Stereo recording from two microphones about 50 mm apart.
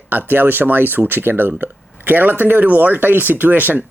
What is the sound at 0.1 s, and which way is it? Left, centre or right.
A man's voice, right.